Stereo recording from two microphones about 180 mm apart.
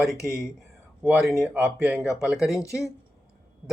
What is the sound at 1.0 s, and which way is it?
Speech, 5° right (ahead or behind).